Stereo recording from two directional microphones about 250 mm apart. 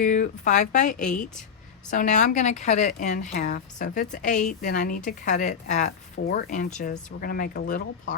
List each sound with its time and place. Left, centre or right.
0.0 s speech: left